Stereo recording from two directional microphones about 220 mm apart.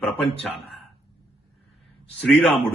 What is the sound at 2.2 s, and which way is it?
Speech, 5° left (ahead or behind).